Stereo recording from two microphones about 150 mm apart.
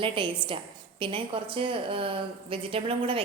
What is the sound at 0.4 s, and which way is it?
A woman's voice, 35° right (ahead or behind).